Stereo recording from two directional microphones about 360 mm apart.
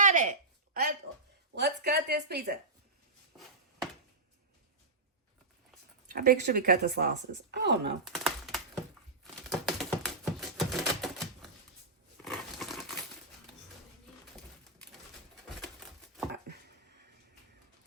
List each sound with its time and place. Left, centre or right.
0.0 s a sound: right
1.5 s speech: right
6.1 s speech: right
8.0 s typing: centre
12.2 s crumpling: centre